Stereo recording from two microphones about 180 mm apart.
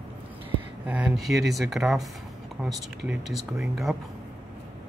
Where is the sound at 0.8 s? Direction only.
5° right (ahead or behind).